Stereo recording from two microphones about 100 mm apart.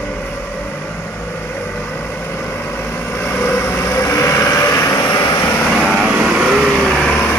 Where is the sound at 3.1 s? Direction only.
20° left (ahead or behind).